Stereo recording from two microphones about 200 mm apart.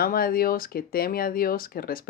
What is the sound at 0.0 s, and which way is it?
Speech, 45° left (ahead or behind).